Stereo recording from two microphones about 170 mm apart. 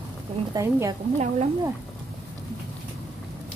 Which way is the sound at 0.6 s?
20° right (ahead or behind).